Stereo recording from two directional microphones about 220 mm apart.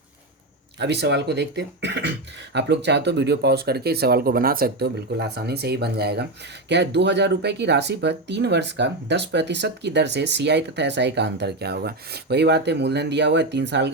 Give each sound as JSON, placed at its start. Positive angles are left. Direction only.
{"t": 0.8, "sound": "speech", "side_deg": -50}